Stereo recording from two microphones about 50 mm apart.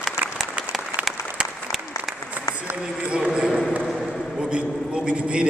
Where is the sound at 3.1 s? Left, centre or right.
Centre.